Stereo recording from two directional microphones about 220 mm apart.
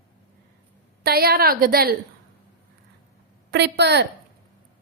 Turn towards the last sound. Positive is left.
turn(degrees=-50)  # may be behind; listen again after turning